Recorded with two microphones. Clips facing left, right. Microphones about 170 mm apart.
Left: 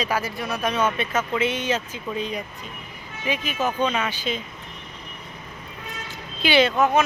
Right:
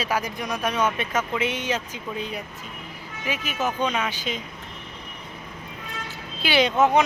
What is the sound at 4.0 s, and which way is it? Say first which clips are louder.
Speech: left 1 dB; 10° right (ahead or behind).